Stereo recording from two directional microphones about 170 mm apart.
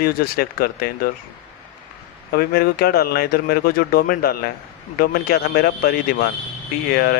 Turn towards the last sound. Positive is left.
turn(degrees=65)  # may be behind; listen again after turning